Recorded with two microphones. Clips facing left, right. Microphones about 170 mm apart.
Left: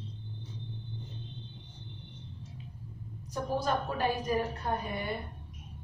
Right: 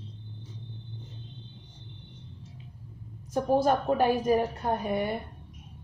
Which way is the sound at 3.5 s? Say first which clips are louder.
Right 8 dB; 50° right (ahead or behind).